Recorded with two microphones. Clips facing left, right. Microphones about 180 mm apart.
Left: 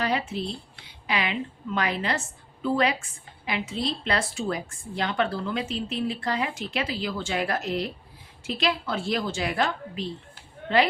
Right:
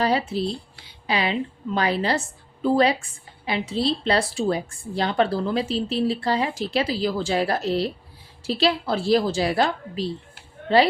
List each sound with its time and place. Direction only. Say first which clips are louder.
0.0 s a woman's voice: right 5 dB; 35° right (ahead or behind)